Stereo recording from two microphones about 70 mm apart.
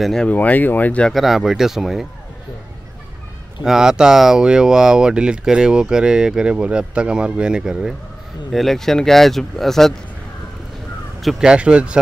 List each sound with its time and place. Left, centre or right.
0.0 s speech: centre
0.3 s speech: left
1.1 s speech: centre
3.6 s speech: centre
8.5 s speech: centre
11.3 s speech: centre